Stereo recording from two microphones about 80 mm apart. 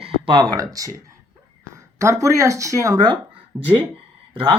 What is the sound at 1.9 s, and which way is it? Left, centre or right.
Speech, right.